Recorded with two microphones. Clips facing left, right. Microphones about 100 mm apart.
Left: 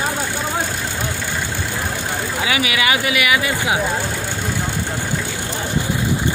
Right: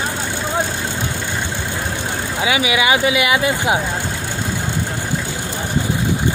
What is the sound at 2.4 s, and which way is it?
Speech, 20° right (ahead or behind).